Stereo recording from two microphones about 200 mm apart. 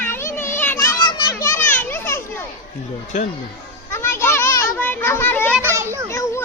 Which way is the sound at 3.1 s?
40° left (ahead or behind).